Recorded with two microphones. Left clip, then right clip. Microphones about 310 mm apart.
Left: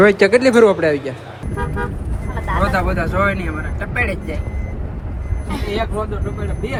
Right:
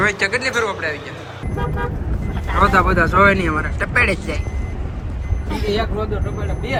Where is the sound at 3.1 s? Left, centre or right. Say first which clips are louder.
Right 5 dB; left.